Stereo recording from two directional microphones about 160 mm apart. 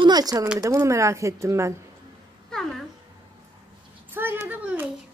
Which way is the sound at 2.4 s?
5° left (ahead or behind).